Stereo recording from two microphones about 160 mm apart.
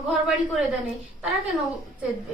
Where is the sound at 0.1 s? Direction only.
Centre (ahead or behind).